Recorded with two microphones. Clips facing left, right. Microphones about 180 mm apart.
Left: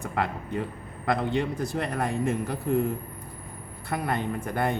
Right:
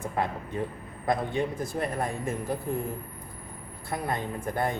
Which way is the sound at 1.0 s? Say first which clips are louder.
Left 1 dB; 70° left (ahead or behind).